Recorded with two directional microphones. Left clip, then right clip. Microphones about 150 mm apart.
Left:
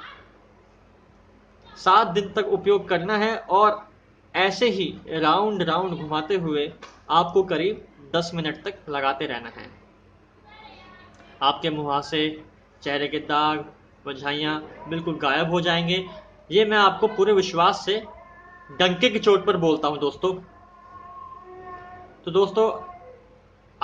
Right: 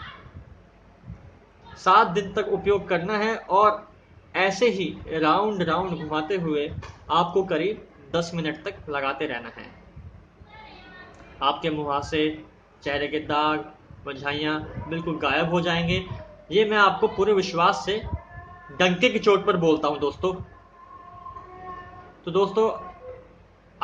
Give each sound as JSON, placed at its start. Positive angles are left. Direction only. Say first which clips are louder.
{"t": 1.7, "sound": "a man's voice", "louder": "even", "side_deg": 20}
{"t": 11.3, "sound": "a man's voice", "louder": "left 2 dB", "side_deg": 20}
{"t": 22.2, "sound": "a man's voice", "louder": "left 2 dB", "side_deg": 15}